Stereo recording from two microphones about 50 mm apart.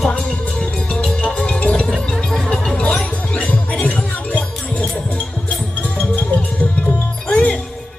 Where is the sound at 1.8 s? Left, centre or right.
Centre.